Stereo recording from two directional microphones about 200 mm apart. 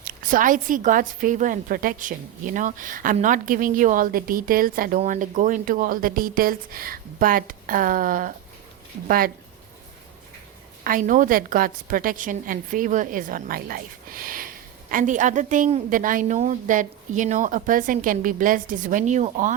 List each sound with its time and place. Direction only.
0.0 s a woman's voice: 45° right (ahead or behind)
10.8 s a woman's voice: 40° right (ahead or behind)